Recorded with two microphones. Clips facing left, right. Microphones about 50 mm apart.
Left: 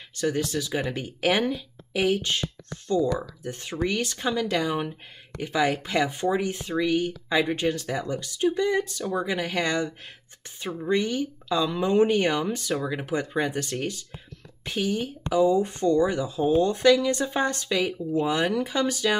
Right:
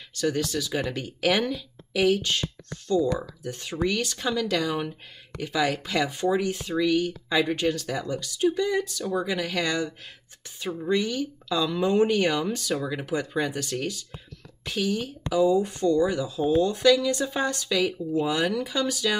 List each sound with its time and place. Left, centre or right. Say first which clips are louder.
0.1 s speech: even; left
3.4 s speech: right 1 dB; left
12.7 s speech: left 1 dB; centre
13.0 s speech: left 1 dB; left